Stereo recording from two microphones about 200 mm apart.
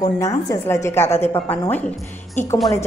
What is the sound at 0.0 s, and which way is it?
A woman's voice, 15° left (ahead or behind).